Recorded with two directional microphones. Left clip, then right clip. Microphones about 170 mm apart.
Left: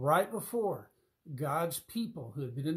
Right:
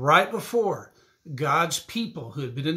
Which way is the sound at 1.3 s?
5° right (ahead or behind).